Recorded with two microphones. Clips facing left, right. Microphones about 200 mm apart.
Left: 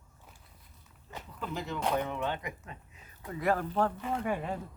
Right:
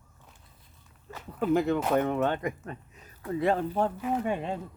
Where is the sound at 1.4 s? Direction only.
55° right (ahead or behind).